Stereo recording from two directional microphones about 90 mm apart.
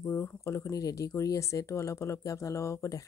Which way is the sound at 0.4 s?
35° left (ahead or behind).